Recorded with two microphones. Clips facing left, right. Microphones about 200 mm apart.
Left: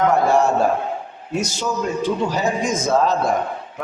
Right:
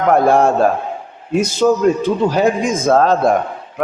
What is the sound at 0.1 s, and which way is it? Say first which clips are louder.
A man's voice: right 4 dB; 55° right (ahead or behind).